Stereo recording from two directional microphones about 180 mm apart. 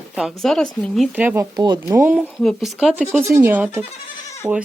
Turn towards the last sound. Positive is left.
turn(degrees=-15)  # may be behind; listen again after turning